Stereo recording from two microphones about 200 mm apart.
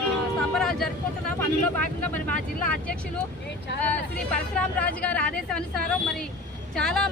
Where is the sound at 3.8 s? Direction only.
5° left (ahead or behind).